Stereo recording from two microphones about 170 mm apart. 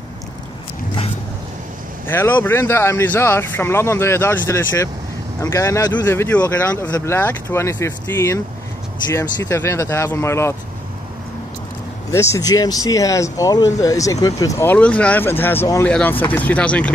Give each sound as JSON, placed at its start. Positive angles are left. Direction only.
{"t": 2.0, "sound": "speech", "side_deg": 15}
{"t": 12.1, "sound": "speech", "side_deg": 15}